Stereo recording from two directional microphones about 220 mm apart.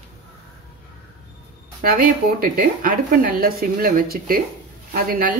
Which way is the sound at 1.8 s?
40° right (ahead or behind).